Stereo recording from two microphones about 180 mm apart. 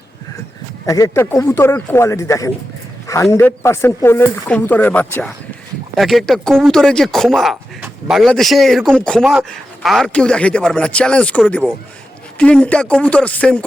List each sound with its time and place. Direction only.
0.9 s speech: 20° left (ahead or behind)